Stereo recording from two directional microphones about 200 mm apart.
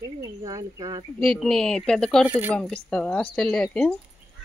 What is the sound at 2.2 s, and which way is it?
Speech, 10° right (ahead or behind).